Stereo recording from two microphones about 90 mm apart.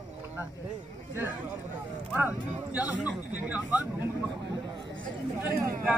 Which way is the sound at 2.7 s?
15° right (ahead or behind).